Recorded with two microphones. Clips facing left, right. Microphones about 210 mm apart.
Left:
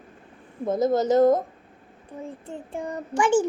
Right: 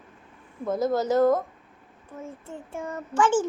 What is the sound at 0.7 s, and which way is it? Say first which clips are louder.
A child's voice: left 3 dB; 20° left (ahead or behind).